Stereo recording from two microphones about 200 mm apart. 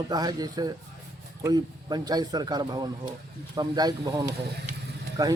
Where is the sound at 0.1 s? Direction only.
20° right (ahead or behind).